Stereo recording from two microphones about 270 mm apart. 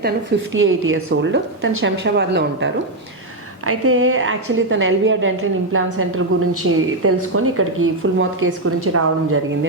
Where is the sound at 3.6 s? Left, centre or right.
Right.